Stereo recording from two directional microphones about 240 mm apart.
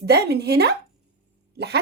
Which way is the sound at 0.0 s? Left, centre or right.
Right.